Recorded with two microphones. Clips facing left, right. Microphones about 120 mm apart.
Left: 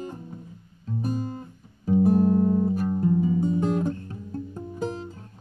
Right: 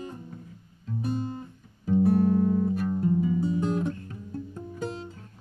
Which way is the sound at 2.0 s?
25° left (ahead or behind).